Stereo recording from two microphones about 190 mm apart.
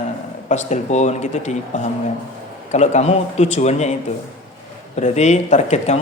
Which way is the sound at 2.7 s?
35° left (ahead or behind).